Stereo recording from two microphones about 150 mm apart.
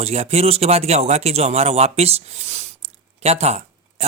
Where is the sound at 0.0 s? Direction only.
45° right (ahead or behind).